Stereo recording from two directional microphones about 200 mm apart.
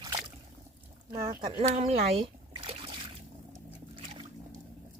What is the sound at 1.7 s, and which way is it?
Speech, 30° right (ahead or behind).